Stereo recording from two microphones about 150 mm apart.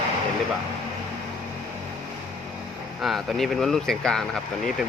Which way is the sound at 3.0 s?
Centre (ahead or behind).